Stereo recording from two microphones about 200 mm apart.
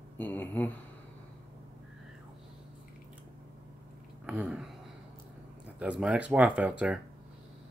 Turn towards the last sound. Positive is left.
turn(degrees=-5)  # may be behind; listen again after turning